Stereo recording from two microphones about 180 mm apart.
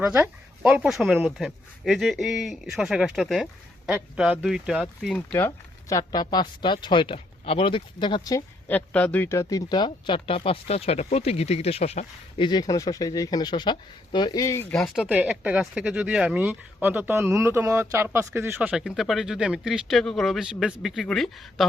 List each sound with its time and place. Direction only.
0.1 s speech: 10° right (ahead or behind)
5.1 s speech: 10° left (ahead or behind)
8.6 s speech: 5° left (ahead or behind); by 12.5 s 35° left (ahead or behind)
12.5 s speech: 20° left (ahead or behind); by 18.7 s 10° right (ahead or behind)
18.7 s speech: centre (ahead or behind)